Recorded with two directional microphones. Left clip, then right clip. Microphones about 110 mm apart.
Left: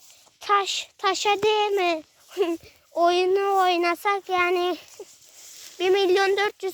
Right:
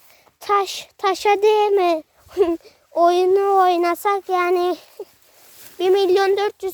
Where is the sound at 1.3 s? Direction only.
60° right (ahead or behind); by 4.8 s 35° right (ahead or behind).